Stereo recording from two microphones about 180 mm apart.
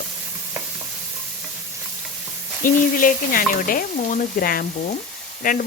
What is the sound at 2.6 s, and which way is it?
Speech, 50° left (ahead or behind).